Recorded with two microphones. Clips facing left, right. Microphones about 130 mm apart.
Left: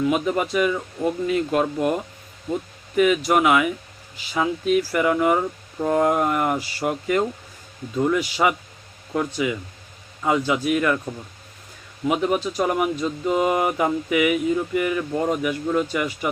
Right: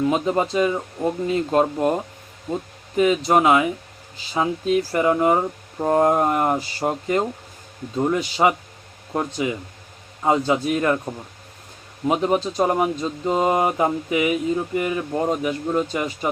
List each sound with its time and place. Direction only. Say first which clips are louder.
0.0 s speech: right 1 dB; 30° right (ahead or behind)